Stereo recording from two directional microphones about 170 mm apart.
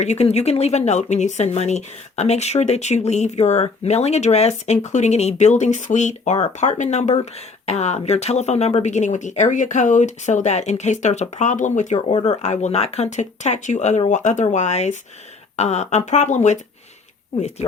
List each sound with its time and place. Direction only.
0.0 s speech: 40° left (ahead or behind)